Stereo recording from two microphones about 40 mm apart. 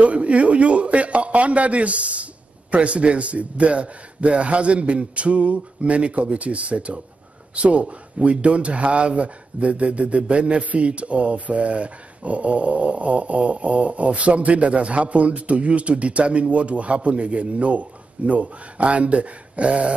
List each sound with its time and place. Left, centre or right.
0.0 s speech: right